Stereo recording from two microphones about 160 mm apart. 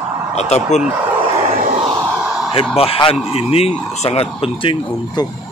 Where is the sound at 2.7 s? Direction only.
35° left (ahead or behind).